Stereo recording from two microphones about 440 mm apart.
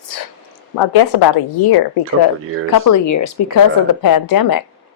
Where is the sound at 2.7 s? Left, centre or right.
Left.